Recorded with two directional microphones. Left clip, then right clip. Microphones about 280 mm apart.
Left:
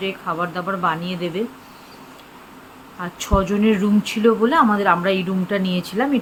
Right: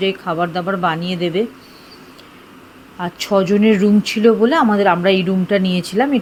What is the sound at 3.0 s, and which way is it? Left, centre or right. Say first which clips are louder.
Speech: right 5 dB; centre.